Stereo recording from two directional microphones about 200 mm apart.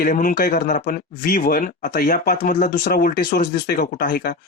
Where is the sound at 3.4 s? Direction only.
60° left (ahead or behind).